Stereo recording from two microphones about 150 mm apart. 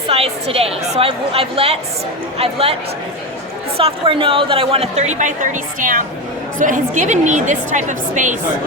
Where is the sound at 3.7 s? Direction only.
35° right (ahead or behind); by 8.3 s 55° right (ahead or behind).